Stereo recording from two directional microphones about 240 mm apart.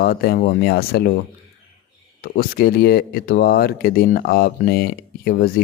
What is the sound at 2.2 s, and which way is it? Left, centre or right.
Speech, left.